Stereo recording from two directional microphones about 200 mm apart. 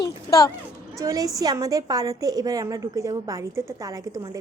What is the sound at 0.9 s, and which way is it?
A woman's voice, 15° right (ahead or behind).